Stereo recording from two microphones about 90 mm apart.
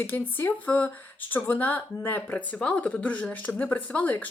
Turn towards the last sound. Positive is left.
turn(degrees=20)  # may be behind; listen again after turning